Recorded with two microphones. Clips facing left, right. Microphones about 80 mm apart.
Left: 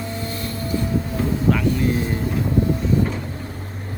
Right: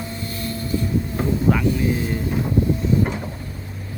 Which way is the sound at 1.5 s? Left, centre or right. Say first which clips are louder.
Even; centre.